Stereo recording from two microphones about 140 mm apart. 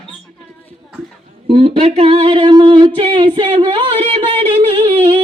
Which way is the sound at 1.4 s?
45° right (ahead or behind).